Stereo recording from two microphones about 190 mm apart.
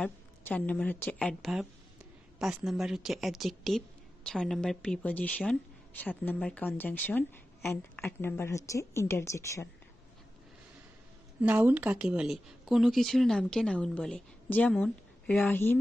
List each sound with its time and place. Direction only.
0.0 s speech: 5° left (ahead or behind)
11.4 s speech: 10° right (ahead or behind); by 15.8 s 10° left (ahead or behind)